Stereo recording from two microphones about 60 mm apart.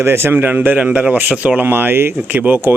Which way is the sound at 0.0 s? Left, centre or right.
Right.